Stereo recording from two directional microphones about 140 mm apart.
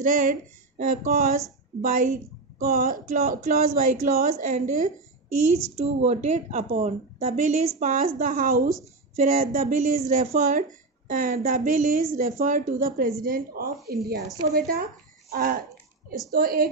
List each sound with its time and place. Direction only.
0.0 s speech: 75° right (ahead or behind)
2.6 s speech: 85° right; by 4.9 s 70° right (ahead or behind)
5.8 s a woman's voice: 50° right (ahead or behind); by 8.6 s 75° right (ahead or behind)
9.1 s speech: 60° right (ahead or behind); by 16.6 s 90° right